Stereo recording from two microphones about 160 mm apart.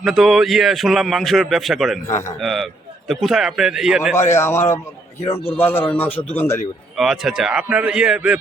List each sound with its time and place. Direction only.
0.0 s a man's voice: centre (ahead or behind)
2.0 s a man's voice: 15° left (ahead or behind)
2.4 s a man's voice: centre (ahead or behind)
4.1 s a man's voice: 15° left (ahead or behind)
6.9 s a man's voice: centre (ahead or behind)